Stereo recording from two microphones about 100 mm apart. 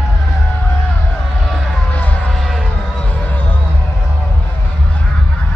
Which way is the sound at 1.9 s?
15° left (ahead or behind).